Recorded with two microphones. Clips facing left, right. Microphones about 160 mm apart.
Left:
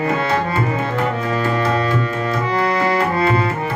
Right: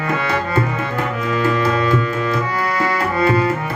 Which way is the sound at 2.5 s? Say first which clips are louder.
Left 3 dB; 25° left (ahead or behind).